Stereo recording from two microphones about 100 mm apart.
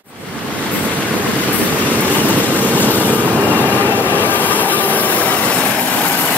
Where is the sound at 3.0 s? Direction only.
15° right (ahead or behind).